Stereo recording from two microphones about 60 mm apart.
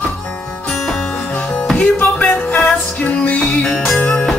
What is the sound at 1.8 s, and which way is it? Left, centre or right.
Music, left.